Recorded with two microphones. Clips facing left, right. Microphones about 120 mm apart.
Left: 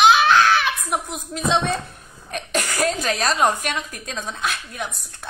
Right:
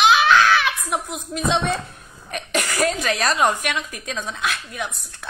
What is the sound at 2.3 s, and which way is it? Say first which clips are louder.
A woman's voice: even; 40° left (ahead or behind).